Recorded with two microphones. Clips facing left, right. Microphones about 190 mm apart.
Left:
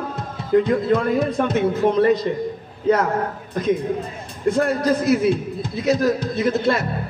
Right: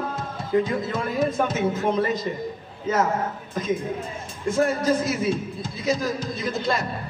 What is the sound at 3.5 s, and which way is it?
A man's voice, 60° left (ahead or behind).